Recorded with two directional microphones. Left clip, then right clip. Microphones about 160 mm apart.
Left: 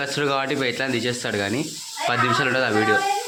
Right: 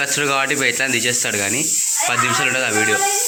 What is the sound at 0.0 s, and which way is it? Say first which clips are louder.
Speech: right 5 dB; 5° left (ahead or behind).